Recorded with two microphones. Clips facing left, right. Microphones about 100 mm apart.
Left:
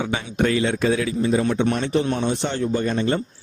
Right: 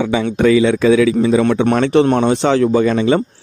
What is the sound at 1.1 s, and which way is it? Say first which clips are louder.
A man's voice: right 7 dB; 90° right.